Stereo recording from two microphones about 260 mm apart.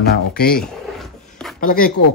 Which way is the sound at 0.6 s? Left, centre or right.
Centre.